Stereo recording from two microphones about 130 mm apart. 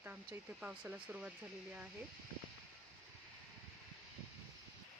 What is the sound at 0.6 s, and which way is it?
Speech, 10° right (ahead or behind).